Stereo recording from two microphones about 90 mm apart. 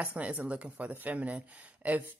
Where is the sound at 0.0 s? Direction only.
15° right (ahead or behind).